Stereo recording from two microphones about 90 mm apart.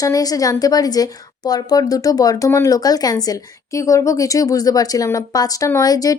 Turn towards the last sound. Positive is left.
turn(degrees=45)  # may be behind; listen again after turning